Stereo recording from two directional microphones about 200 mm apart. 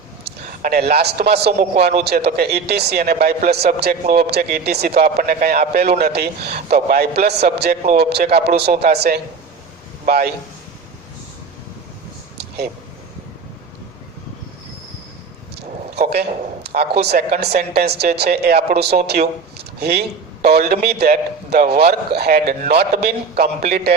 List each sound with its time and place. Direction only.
0.3 s a man's voice: 50° right (ahead or behind)
12.4 s air conditioning: 55° right (ahead or behind)
15.5 s a sound: 55° right (ahead or behind)
16.6 s speech: 55° right (ahead or behind)